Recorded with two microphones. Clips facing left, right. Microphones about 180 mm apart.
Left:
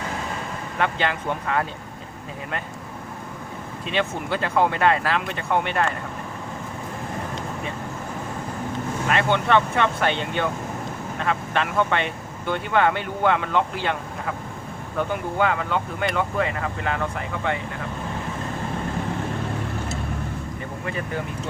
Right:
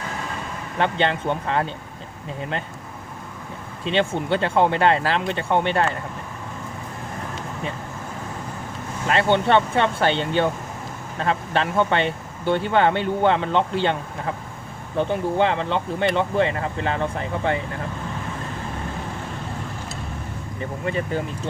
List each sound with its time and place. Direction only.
0.8 s speech: 30° right (ahead or behind)
3.8 s speech: 30° right (ahead or behind)
9.0 s speech: 30° right (ahead or behind)
14.9 s speech: 25° right (ahead or behind)
20.8 s speech: 30° right (ahead or behind)